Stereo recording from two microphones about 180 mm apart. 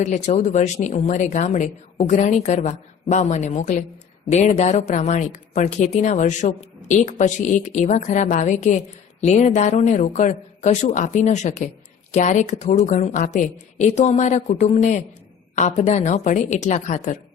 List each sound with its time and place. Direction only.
0.0 s a woman's voice: 40° left (ahead or behind)